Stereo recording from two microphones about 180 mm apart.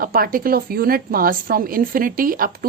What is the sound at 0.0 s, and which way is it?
A woman's voice, 55° right (ahead or behind).